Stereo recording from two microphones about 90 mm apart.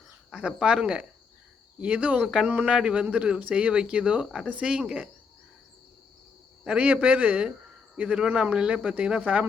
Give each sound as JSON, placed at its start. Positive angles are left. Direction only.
{"t": 0.3, "sound": "speech", "side_deg": -10}
{"t": 6.7, "sound": "speech", "side_deg": -15}